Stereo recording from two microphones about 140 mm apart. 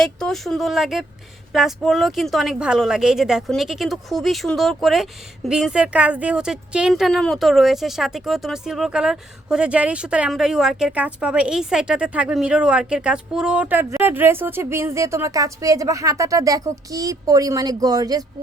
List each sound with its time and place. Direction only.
0.0 s a woman's voice: 5° left (ahead or behind); by 18.3 s 25° right (ahead or behind)